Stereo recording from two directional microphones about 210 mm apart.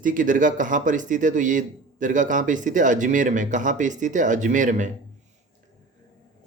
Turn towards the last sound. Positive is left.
turn(degrees=-35)  # may be behind; listen again after turning